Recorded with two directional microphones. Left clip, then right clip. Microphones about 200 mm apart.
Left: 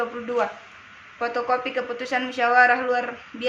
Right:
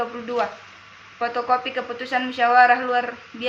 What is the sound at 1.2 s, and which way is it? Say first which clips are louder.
A woman's voice: right 2 dB; 15° left (ahead or behind).